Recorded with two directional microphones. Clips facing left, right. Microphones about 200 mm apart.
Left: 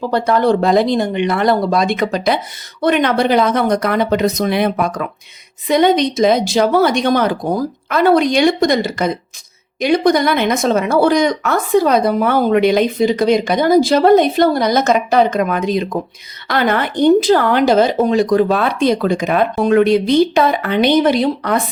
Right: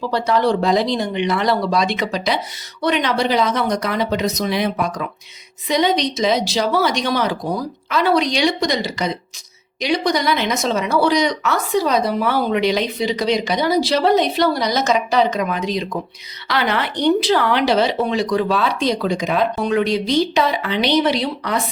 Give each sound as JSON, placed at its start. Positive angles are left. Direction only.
{"t": 0.0, "sound": "a woman's voice", "side_deg": 50}